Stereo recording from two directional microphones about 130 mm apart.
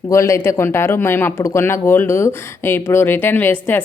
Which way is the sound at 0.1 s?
25° left (ahead or behind).